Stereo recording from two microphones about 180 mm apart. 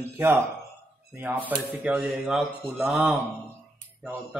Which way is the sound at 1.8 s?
5° right (ahead or behind).